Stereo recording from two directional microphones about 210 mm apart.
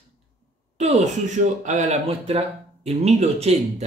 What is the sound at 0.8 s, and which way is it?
Speech, 30° right (ahead or behind).